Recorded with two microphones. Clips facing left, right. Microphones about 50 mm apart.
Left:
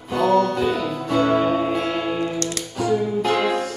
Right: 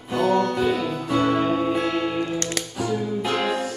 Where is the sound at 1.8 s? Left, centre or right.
Centre.